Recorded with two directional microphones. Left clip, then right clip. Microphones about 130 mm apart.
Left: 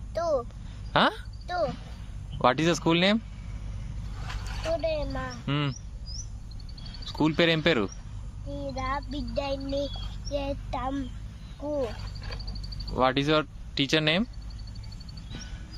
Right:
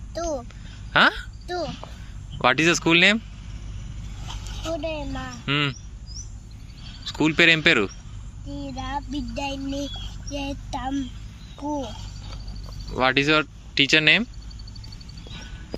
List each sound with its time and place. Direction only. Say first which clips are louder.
0.1 s a sound: left 2 dB; 20° left (ahead or behind)
2.4 s child singing: right 4 dB; 20° left (ahead or behind)
4.8 s child singing: even; 20° left (ahead or behind)
7.0 s speech: right 6 dB; 25° left (ahead or behind)
8.6 s child singing: even; 20° left (ahead or behind)
13.0 s child singing: right 4 dB; 20° left (ahead or behind)